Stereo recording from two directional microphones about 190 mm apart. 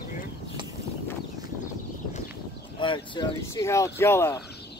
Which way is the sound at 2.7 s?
25° left (ahead or behind).